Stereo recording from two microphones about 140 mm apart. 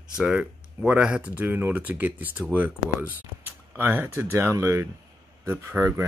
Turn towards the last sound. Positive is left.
turn(degrees=-20)  # may be behind; listen again after turning